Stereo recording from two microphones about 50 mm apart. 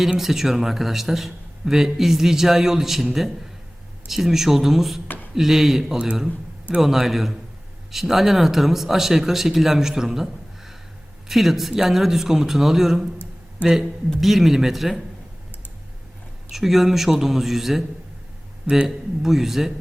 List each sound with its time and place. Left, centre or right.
0.2 s a man's voice: centre
5.0 s a sound: left
5.3 s speech: centre
6.2 s a sound: centre
6.8 s speech: centre
11.3 s a man's voice: centre
14.2 s speech: centre
16.5 s a man's voice: centre